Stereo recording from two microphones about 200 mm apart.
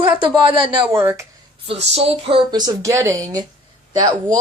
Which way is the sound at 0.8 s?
10° right (ahead or behind).